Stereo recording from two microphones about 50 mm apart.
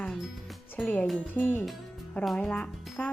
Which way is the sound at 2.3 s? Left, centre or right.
Left.